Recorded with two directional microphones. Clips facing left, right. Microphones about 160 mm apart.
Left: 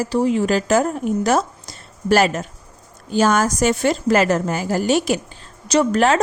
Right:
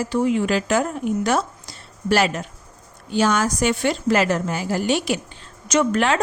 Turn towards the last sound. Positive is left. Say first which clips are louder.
# left 3 dB
turn(degrees=35)  # may be behind; listen again after turning